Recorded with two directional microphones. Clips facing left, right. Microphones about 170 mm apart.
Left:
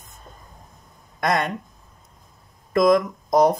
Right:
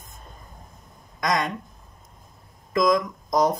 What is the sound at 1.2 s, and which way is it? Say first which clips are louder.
Speech: left 2 dB; 55° left (ahead or behind).